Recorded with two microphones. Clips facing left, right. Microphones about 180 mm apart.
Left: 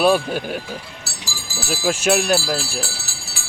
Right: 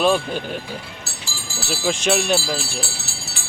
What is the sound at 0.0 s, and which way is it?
Speech, 10° left (ahead or behind).